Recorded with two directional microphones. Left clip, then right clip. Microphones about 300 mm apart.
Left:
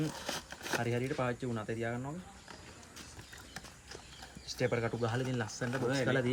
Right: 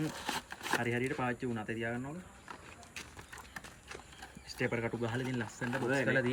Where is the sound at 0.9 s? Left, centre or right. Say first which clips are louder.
Even; centre.